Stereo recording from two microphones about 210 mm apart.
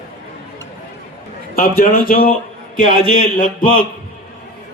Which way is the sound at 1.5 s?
45° left (ahead or behind).